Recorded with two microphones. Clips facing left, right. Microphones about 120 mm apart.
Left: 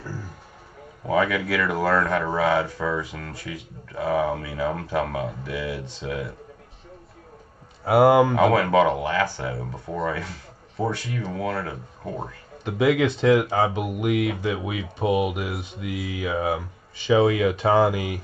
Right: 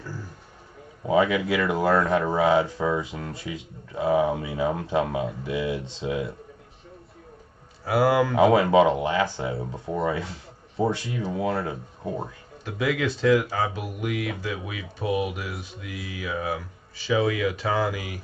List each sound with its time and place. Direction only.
1.0 s speech: 20° right (ahead or behind)
7.8 s speech: 25° left (ahead or behind)
8.4 s speech: 20° right (ahead or behind)
12.6 s speech: 20° left (ahead or behind)